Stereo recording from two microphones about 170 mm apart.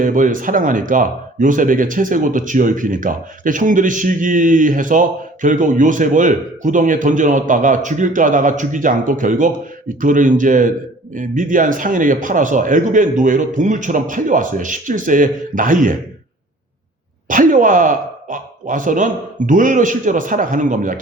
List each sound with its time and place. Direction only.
0.0 s speech: 50° right (ahead or behind)
17.2 s speech: 50° right (ahead or behind)